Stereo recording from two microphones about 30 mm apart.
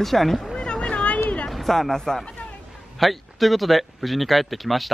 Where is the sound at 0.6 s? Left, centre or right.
Left.